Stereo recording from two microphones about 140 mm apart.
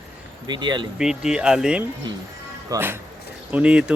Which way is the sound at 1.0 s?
5° right (ahead or behind).